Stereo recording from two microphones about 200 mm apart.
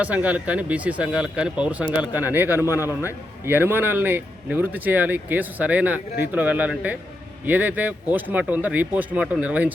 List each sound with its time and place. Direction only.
0.0 s a man's voice: 5° right (ahead or behind)